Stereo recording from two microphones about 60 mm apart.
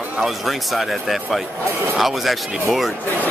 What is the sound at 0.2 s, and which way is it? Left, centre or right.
Speech, centre.